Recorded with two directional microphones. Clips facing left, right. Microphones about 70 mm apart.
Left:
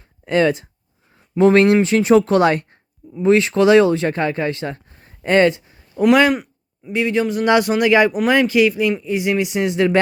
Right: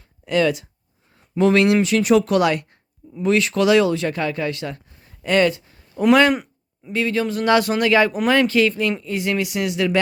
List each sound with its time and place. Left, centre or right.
0.3 s speech: left
6.0 s speech: centre
6.3 s a sound: centre
6.9 s speech: centre